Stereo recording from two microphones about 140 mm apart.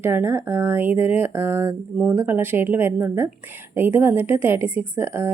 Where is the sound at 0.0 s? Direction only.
15° right (ahead or behind).